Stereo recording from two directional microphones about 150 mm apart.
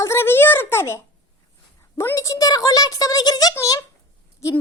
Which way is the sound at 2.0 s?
20° left (ahead or behind).